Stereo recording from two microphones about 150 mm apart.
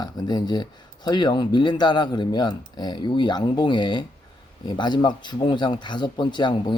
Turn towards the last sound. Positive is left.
turn(degrees=30)  # may be behind; listen again after turning